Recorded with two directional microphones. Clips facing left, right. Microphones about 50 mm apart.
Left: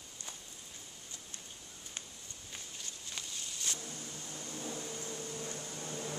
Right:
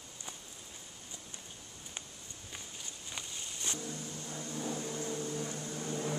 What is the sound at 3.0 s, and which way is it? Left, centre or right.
Vehicle, centre.